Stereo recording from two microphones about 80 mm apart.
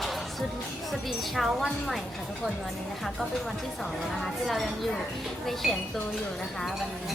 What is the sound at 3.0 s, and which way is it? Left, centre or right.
Speech, centre.